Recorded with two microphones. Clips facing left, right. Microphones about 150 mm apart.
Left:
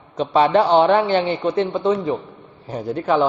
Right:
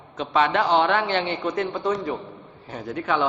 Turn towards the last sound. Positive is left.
turn(degrees=35)  # may be behind; listen again after turning